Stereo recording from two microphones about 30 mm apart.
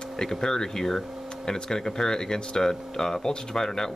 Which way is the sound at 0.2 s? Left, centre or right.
Centre.